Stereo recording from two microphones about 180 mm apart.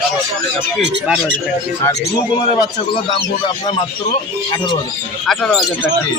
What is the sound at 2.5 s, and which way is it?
Speech, 30° left (ahead or behind).